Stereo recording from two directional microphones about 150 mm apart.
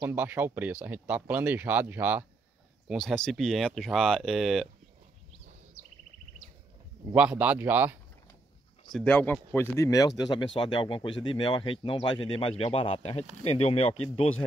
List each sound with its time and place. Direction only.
0.1 s speech: 10° right (ahead or behind)
2.9 s speech: centre (ahead or behind)
7.2 s speech: 10° right (ahead or behind)
8.9 s speech: 10° left (ahead or behind); by 14.3 s 40° left (ahead or behind)